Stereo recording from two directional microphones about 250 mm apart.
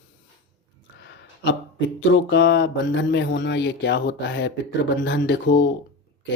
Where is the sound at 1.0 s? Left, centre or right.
Left.